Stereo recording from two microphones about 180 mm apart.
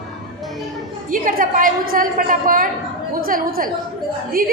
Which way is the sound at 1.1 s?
50° right (ahead or behind).